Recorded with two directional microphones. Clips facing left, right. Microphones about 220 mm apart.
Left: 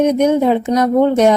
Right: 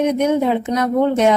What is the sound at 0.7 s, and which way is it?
Speech, 40° left (ahead or behind).